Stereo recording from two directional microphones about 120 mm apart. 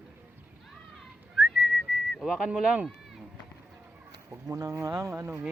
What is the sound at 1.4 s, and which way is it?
Whistling, centre (ahead or behind).